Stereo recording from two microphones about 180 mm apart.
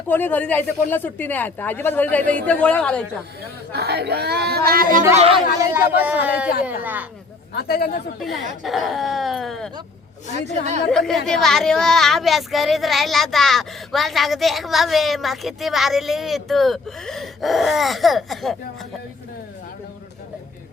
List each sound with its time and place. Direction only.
0.1 s speech: 10° left (ahead or behind)
3.7 s speech: 65° right (ahead or behind)
5.1 s a woman's voice: 35° right (ahead or behind)
5.5 s speech: 10° right (ahead or behind)
7.5 s speech: 60° left (ahead or behind)
8.2 s speech: centre (ahead or behind)
10.3 s a woman's voice: 40° right (ahead or behind)
10.9 s speech: centre (ahead or behind)